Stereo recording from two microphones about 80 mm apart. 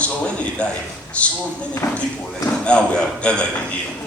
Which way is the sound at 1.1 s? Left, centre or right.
Centre.